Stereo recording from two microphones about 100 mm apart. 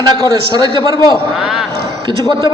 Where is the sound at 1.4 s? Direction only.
5° right (ahead or behind).